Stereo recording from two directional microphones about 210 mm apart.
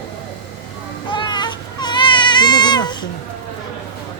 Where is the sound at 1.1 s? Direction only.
20° left (ahead or behind).